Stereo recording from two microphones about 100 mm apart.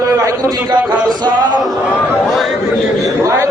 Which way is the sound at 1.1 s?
45° right (ahead or behind).